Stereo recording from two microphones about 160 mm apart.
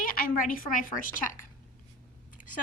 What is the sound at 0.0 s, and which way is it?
A woman's voice, 60° left (ahead or behind).